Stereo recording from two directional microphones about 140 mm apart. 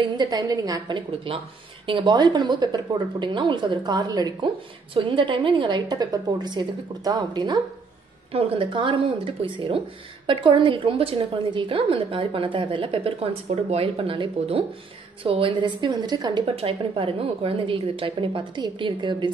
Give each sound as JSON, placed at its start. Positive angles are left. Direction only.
{"t": 0.0, "sound": "a woman's voice", "side_deg": -30}
{"t": 8.3, "sound": "a woman's voice", "side_deg": -45}
{"t": 16.5, "sound": "a woman's voice", "side_deg": -40}